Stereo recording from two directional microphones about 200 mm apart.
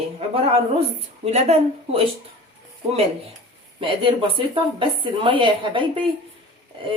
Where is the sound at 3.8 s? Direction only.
25° right (ahead or behind).